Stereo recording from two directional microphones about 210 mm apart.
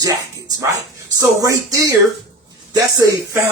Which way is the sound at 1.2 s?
15° right (ahead or behind).